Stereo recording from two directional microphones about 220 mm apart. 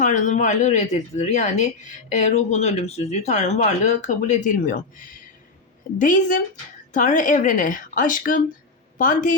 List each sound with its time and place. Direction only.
0.0 s a woman's voice: 35° left (ahead or behind)